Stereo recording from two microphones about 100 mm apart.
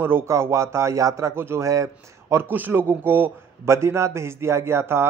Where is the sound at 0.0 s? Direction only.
25° right (ahead or behind).